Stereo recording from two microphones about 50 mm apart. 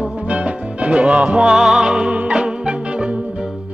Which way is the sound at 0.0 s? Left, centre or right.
Right.